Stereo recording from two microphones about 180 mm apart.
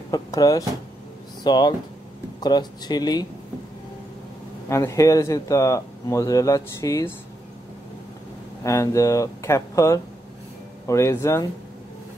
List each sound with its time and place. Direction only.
0.1 s speech: 20° left (ahead or behind)
4.6 s speech: 15° left (ahead or behind)
8.6 s speech: 15° left (ahead or behind)